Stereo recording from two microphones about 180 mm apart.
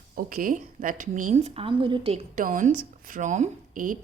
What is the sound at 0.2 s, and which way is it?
Speech, 50° right (ahead or behind).